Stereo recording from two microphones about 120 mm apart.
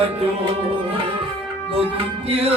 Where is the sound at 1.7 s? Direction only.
55° right (ahead or behind).